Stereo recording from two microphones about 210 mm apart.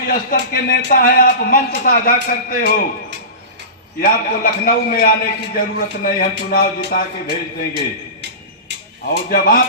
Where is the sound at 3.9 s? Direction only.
45° left (ahead or behind).